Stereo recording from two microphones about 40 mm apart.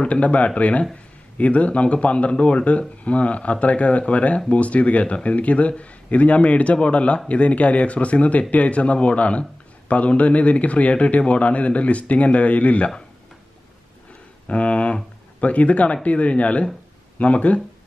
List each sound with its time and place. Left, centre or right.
0.0 s speech: left
14.5 s speech: left